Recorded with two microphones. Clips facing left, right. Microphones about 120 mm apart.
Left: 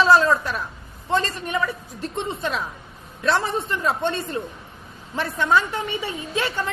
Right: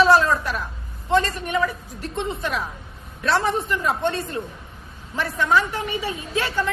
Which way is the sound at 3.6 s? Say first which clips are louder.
Right 1 dB; 25° left (ahead or behind).